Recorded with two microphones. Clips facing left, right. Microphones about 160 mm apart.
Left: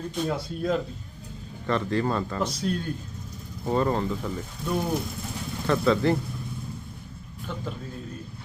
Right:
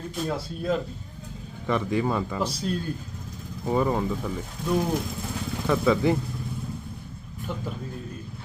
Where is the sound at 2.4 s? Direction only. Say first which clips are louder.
Even; 30° right (ahead or behind).